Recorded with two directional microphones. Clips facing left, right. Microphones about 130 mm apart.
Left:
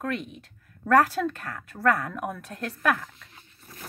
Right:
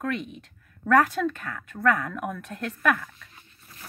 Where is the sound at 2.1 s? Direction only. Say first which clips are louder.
Even; 5° left (ahead or behind).